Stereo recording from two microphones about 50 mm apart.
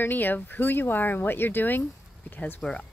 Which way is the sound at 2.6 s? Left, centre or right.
Left.